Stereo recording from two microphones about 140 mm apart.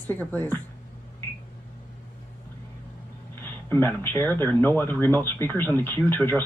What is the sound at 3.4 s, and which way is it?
Speech, 15° left (ahead or behind).